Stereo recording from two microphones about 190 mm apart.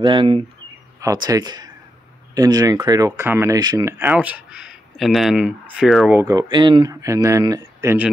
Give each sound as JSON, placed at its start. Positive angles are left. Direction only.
{"t": 0.0, "sound": "speech", "side_deg": -25}
{"t": 6.1, "sound": "speech", "side_deg": -15}